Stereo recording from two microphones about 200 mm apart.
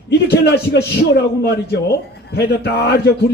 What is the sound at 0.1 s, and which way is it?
A man's voice, 55° left (ahead or behind).